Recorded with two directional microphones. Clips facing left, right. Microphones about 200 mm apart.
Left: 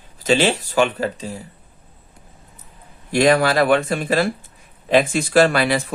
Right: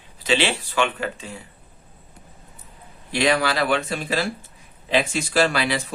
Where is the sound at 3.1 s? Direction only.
50° left (ahead or behind).